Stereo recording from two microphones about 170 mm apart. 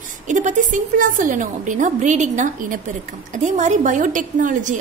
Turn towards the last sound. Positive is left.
turn(degrees=-50)  # may be behind; listen again after turning